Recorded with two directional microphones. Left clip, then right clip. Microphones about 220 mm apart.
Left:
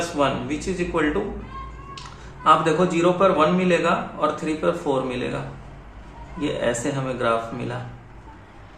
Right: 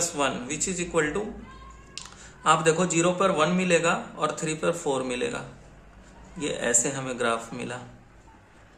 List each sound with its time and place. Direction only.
0.2 s a man's voice: 50° right (ahead or behind)
2.4 s a man's voice: 50° right (ahead or behind)
6.4 s a man's voice: 50° right (ahead or behind)